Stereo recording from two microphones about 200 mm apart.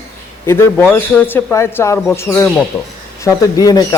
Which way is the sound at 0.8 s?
10° left (ahead or behind).